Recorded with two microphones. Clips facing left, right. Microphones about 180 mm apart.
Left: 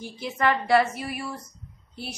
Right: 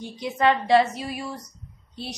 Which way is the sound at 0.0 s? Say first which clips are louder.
Right 3 dB; 20° right (ahead or behind).